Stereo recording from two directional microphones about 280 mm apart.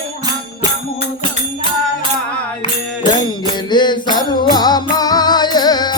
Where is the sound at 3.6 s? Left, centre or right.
Centre.